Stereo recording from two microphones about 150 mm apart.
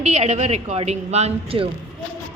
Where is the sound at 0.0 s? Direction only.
50° right (ahead or behind).